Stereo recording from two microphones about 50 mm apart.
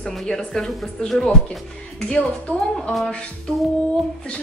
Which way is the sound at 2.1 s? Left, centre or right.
Left.